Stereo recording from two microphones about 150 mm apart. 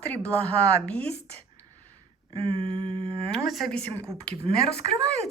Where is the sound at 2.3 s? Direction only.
35° right (ahead or behind).